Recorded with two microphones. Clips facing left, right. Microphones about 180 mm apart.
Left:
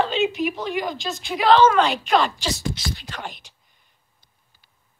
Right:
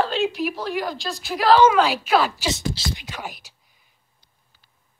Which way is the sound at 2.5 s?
25° right (ahead or behind).